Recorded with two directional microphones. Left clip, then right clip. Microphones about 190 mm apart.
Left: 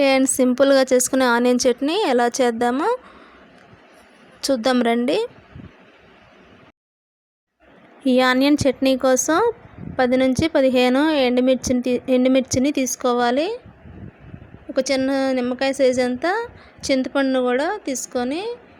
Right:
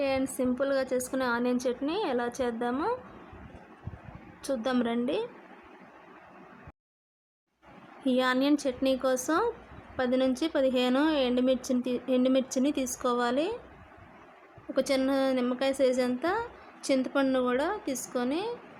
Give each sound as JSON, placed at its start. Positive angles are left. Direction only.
{"t": 0.0, "sound": "a woman's voice", "side_deg": 35}
{"t": 4.4, "sound": "a woman's voice", "side_deg": 30}
{"t": 8.0, "sound": "a woman's voice", "side_deg": 30}
{"t": 14.7, "sound": "a woman's voice", "side_deg": 25}